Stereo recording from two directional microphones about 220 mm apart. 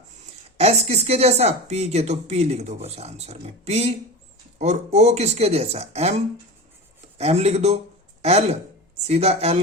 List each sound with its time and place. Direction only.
0.5 s speech: 30° right (ahead or behind)
7.2 s speech: 30° right (ahead or behind)